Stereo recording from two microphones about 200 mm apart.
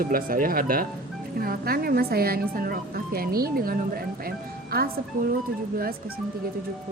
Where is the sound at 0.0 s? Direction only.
45° right (ahead or behind).